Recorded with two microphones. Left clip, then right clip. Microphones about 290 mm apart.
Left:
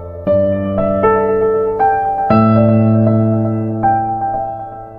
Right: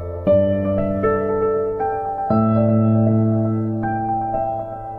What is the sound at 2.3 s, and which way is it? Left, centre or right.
Music, left.